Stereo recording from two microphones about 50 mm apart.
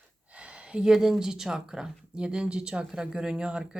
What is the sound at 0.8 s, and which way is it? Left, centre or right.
Speech, centre.